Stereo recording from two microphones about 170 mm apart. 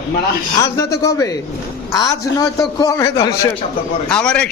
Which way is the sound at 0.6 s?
20° left (ahead or behind).